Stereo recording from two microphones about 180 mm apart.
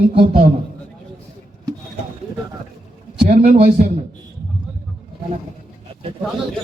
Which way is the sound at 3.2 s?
40° right (ahead or behind).